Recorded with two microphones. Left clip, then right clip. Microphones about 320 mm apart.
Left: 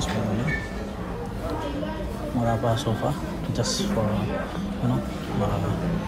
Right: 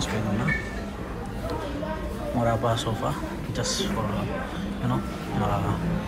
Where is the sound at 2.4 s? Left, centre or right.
Centre.